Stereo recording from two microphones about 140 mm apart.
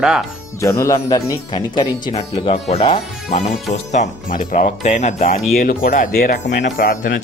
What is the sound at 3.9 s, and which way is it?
Speech, 70° left (ahead or behind).